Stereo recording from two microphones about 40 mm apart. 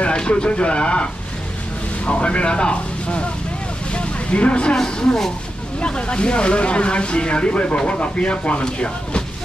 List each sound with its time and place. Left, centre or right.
0.0 s speech: left
2.0 s speech: left
3.9 s vehicle: left
4.7 s speech: centre